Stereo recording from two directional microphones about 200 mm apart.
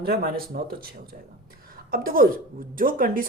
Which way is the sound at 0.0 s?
50° right (ahead or behind).